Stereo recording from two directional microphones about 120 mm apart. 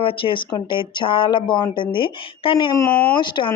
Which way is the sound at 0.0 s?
45° left (ahead or behind).